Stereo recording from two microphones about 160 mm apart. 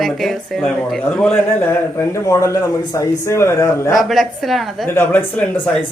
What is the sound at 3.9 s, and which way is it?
Speech, centre (ahead or behind).